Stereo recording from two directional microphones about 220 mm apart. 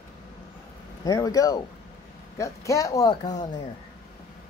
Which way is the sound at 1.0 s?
15° left (ahead or behind).